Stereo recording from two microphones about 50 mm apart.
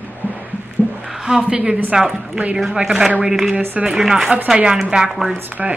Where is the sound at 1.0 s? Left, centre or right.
Centre.